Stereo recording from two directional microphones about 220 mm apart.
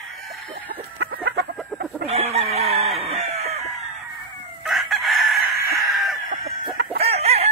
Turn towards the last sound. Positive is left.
turn(degrees=-30)  # may be behind; listen again after turning